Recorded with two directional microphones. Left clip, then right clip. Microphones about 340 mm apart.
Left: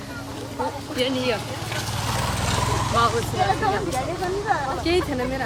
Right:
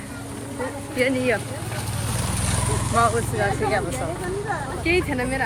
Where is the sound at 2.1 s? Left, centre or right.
Left.